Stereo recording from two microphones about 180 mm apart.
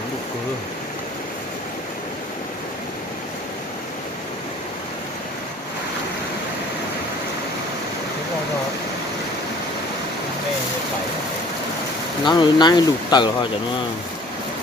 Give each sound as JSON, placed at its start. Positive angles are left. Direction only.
{"t": 12.2, "sound": "speech", "side_deg": 25}